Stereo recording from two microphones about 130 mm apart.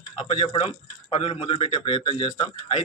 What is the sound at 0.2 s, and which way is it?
A man's voice, 45° left (ahead or behind).